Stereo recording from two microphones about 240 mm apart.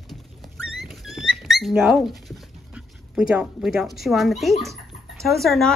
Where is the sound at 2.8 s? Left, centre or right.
Centre.